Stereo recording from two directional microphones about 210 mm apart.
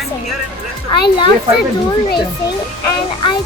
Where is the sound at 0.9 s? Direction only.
20° left (ahead or behind).